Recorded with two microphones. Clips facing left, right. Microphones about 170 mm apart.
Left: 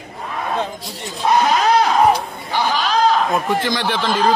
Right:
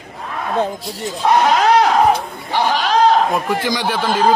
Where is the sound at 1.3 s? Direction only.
65° right (ahead or behind).